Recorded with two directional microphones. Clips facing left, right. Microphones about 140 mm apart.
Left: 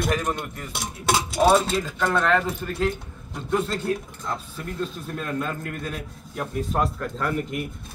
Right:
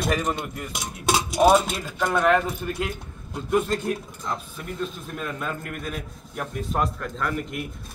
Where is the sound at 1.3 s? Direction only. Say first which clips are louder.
Right 1 dB; 15° right (ahead or behind).